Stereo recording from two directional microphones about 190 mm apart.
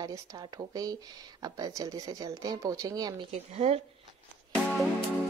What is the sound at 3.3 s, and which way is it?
Speech, 35° right (ahead or behind).